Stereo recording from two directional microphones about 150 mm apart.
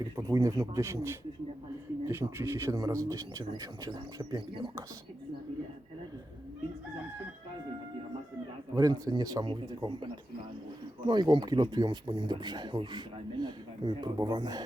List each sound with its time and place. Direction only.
0.2 s a man's voice: 20° right (ahead or behind)
8.7 s a man's voice: 25° right (ahead or behind)